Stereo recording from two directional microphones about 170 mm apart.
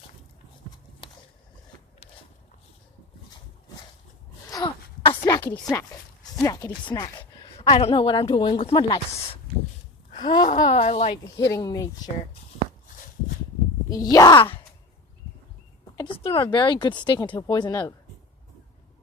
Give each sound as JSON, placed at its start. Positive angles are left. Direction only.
{"t": 1.0, "sound": "a sound", "side_deg": 35}
{"t": 4.5, "sound": "a sound", "side_deg": 25}
{"t": 6.4, "sound": "speech", "side_deg": 20}
{"t": 7.7, "sound": "speech", "side_deg": 35}
{"t": 10.7, "sound": "speech", "side_deg": 40}
{"t": 11.3, "sound": "speech", "side_deg": 20}
{"t": 13.9, "sound": "speech", "side_deg": 20}
{"t": 16.0, "sound": "speech", "side_deg": 35}